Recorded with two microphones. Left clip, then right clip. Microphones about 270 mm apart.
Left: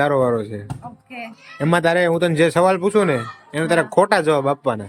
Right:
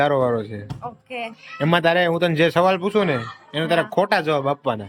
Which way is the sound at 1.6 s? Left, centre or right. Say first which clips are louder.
Left 1 dB; centre.